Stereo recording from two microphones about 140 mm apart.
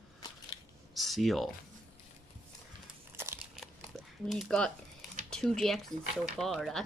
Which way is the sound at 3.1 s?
15° right (ahead or behind).